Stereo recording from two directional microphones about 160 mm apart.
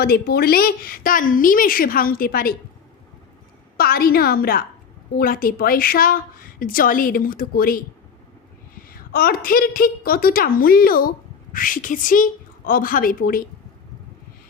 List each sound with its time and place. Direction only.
0.0 s a woman's voice: 75° left (ahead or behind)
3.8 s a woman's voice: 70° left (ahead or behind)